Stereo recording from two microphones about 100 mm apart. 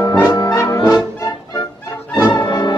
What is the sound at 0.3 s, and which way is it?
Brass instrument, 30° left (ahead or behind).